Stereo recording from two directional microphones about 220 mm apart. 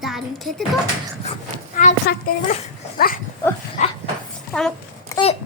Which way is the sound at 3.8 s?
35° left (ahead or behind).